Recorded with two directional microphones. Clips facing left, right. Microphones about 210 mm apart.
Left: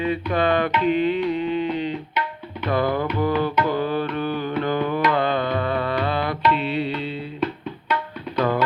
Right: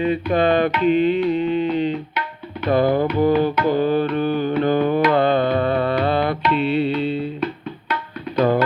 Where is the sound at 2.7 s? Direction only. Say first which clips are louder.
Right 5 dB; 25° right (ahead or behind).